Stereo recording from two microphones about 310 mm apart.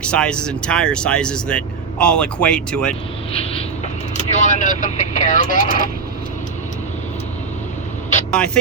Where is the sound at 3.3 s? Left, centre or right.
Centre.